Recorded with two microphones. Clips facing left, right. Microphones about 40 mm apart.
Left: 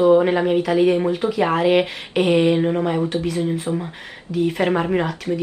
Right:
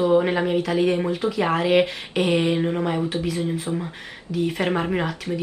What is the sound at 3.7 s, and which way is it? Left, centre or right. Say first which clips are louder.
Speech: left 3 dB; centre.